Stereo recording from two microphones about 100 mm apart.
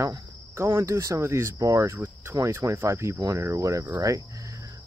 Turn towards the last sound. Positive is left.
turn(degrees=-35)  # may be behind; listen again after turning